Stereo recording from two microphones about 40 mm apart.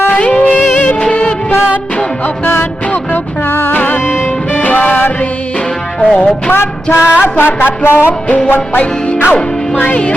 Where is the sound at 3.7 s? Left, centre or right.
Left.